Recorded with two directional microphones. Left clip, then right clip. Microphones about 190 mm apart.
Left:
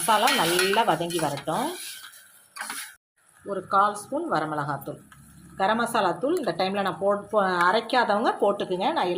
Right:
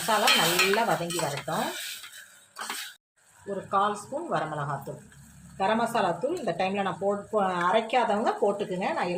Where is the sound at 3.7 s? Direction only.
40° left (ahead or behind).